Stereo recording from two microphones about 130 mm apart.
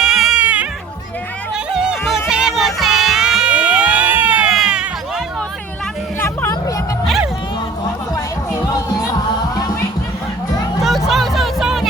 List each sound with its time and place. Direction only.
0.0 s music: 5° right (ahead or behind)
1.7 s music: 5° right (ahead or behind)
6.1 s hubbub: 20° left (ahead or behind)
8.1 s music: 30° left (ahead or behind)
11.1 s music: centre (ahead or behind)